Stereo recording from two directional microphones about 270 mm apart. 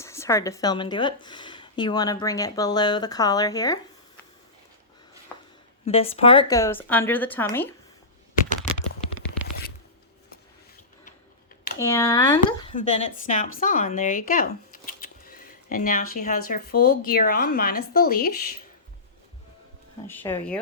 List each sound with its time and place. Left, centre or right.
0.0 s speech: centre
5.8 s speech: left
11.8 s speech: centre; by 14.4 s left
15.0 s a sound: left
16.5 s speech: left
20.1 s speech: centre